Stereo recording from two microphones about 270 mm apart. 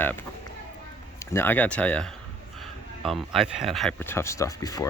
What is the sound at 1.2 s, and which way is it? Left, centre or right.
Speech, centre.